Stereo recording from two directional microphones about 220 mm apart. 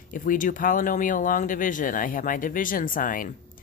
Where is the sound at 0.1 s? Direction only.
35° left (ahead or behind).